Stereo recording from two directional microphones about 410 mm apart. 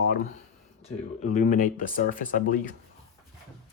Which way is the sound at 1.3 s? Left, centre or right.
Centre.